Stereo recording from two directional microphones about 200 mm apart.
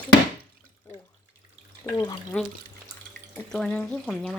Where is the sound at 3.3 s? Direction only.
5° left (ahead or behind).